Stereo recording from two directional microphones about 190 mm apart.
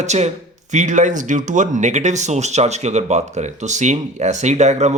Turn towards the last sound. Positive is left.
turn(degrees=-35)  # may be behind; listen again after turning